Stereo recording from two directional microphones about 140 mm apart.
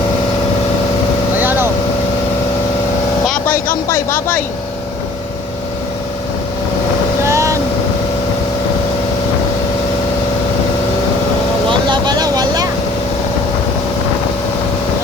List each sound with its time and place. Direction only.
1.4 s vehicle: 15° right (ahead or behind)
3.2 s vehicle: 10° left (ahead or behind)
3.8 s speech: 15° left (ahead or behind)
7.3 s boat: 20° right (ahead or behind)
11.7 s vehicle: 30° right (ahead or behind)